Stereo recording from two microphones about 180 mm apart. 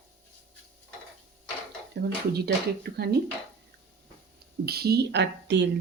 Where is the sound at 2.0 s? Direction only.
65° right (ahead or behind).